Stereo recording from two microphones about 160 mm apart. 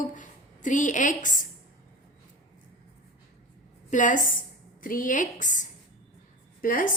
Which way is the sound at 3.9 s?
50° left (ahead or behind).